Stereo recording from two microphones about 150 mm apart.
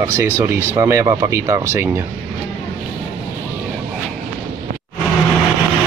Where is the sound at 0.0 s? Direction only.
20° right (ahead or behind).